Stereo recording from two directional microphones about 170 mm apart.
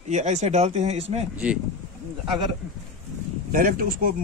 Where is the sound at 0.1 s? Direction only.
45° right (ahead or behind).